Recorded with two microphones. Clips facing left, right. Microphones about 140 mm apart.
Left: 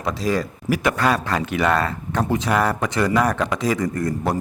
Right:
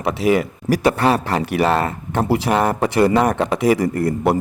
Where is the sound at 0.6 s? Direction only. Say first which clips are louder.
Right 4 dB; 35° right (ahead or behind).